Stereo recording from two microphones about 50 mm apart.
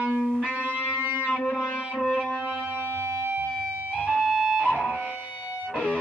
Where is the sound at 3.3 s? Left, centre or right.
Right.